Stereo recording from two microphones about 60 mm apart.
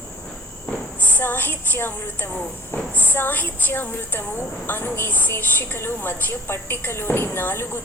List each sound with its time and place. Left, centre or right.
1.0 s a woman's voice: left
2.9 s a woman's voice: left